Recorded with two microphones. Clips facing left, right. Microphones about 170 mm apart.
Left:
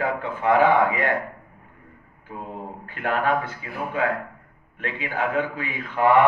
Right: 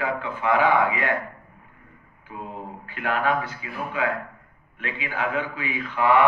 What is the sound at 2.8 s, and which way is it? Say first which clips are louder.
A man's voice: left 1 dB; 50° left (ahead or behind).